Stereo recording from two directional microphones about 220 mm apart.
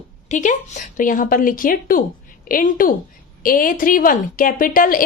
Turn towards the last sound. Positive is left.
turn(degrees=40)  # may be behind; listen again after turning